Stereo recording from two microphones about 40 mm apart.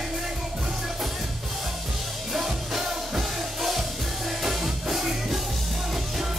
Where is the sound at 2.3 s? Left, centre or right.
Centre.